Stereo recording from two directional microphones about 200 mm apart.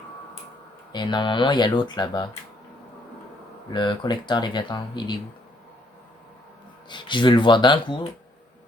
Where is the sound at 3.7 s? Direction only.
20° left (ahead or behind).